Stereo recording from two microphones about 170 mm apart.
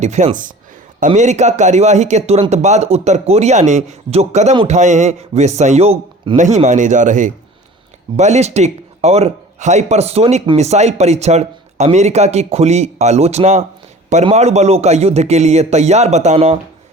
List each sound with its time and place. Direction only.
0.0 s a man's voice: 45° right (ahead or behind)